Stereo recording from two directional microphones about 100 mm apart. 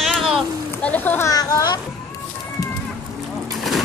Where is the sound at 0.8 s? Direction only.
15° left (ahead or behind).